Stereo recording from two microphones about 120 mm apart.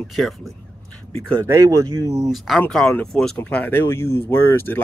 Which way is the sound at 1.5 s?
30° right (ahead or behind).